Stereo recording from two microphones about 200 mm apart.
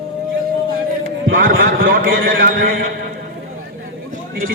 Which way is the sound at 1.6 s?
45° right (ahead or behind).